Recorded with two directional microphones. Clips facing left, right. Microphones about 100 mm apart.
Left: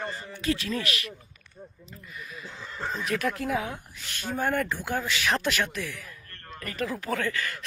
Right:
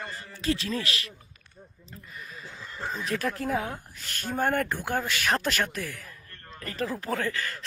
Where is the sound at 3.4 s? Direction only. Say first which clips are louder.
Even; 40° right (ahead or behind).